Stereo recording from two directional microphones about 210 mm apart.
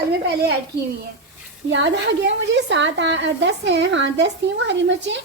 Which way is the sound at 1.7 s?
60° right (ahead or behind).